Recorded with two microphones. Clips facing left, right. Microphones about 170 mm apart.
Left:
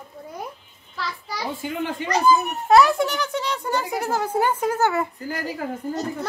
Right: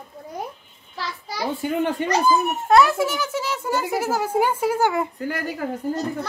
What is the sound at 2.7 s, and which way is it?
Speech, centre (ahead or behind).